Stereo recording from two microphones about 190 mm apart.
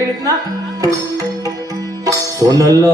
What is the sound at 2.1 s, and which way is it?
Music, 20° right (ahead or behind).